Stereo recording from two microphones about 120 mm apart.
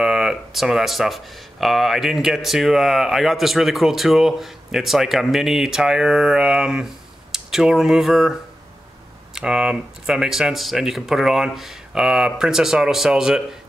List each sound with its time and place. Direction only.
0.0 s speech: 5° right (ahead or behind)